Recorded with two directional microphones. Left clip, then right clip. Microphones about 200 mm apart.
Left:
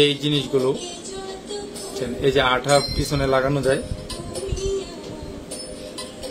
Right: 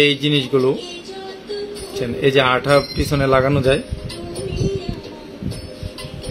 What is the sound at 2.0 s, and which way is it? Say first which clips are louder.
Speech: right 4 dB; 45° right (ahead or behind).